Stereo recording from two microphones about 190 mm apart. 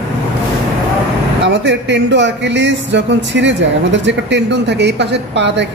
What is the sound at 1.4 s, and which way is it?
Speech, 65° right (ahead or behind).